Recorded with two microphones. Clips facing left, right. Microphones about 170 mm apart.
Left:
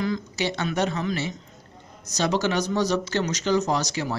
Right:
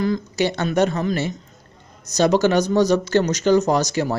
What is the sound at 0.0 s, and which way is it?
Speech, 45° right (ahead or behind).